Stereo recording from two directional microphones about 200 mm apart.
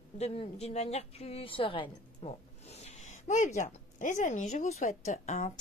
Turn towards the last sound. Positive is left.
turn(degrees=35)  # may be behind; listen again after turning